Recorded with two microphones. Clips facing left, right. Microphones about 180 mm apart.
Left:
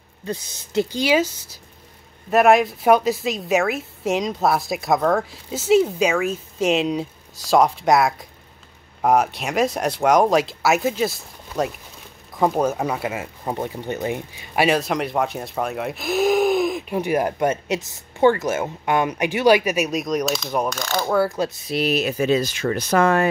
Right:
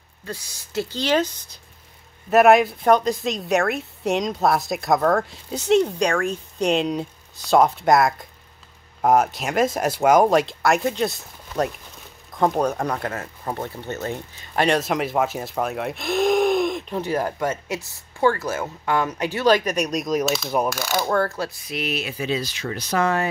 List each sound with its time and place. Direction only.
0.3 s a woman's voice: 20° left (ahead or behind); by 21.0 s 5° right (ahead or behind)
21.0 s speech: 10° left (ahead or behind); by 23.2 s 55° left (ahead or behind)